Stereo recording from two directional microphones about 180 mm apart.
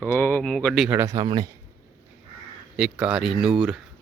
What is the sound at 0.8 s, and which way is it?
Speech, 15° right (ahead or behind).